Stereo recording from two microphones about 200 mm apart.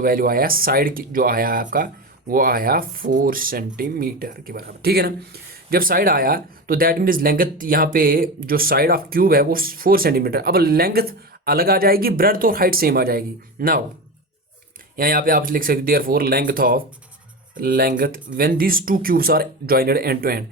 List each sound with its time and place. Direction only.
0.0 s speech: 45° right (ahead or behind)
14.9 s speech: 45° right (ahead or behind)